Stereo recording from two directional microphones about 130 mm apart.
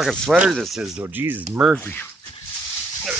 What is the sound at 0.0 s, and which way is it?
Speech, 5° left (ahead or behind).